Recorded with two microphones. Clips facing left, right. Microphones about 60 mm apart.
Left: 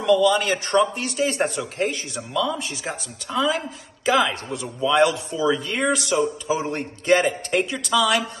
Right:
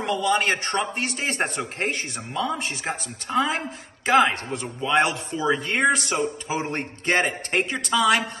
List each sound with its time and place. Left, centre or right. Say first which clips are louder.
0.0 s a man's voice: left 5 dB; right